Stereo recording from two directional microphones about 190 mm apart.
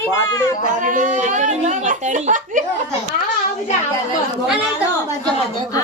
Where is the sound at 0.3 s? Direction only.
20° left (ahead or behind).